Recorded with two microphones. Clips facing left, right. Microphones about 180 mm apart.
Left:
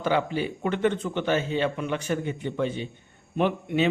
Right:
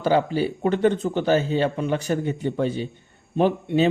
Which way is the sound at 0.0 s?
35° right (ahead or behind).